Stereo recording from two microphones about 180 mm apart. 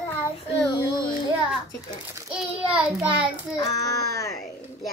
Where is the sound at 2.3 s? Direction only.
5° right (ahead or behind).